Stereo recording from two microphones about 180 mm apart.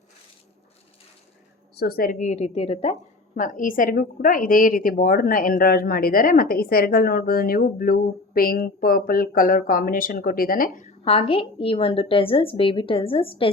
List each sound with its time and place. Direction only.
1.7 s a woman's voice: 60° left (ahead or behind)
11.0 s a woman's voice: 30° left (ahead or behind)